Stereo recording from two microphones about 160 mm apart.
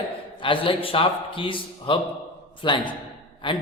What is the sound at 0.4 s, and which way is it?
A man's voice, 30° left (ahead or behind).